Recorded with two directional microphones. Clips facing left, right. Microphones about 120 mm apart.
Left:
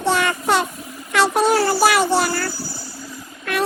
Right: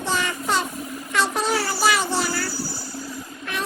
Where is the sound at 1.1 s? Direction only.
70° left (ahead or behind).